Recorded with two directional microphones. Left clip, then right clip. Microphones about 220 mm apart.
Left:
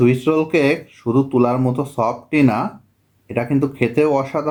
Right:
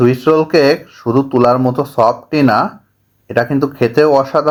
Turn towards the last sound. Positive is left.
turn(degrees=-25)  # may be behind; listen again after turning